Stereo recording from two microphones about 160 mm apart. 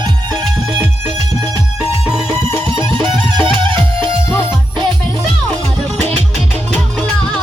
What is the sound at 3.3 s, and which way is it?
Music, 30° right (ahead or behind).